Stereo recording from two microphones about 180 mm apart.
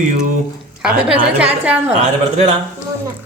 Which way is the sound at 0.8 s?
5° right (ahead or behind).